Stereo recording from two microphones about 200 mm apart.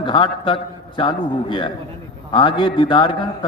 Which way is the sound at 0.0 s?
25° left (ahead or behind).